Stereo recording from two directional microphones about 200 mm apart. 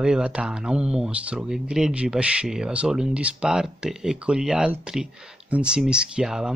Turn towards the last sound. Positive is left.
turn(degrees=-5)  # may be behind; listen again after turning